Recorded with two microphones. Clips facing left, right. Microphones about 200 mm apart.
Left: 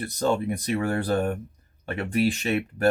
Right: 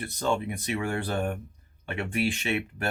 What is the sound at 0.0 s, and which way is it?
Speech, 40° left (ahead or behind).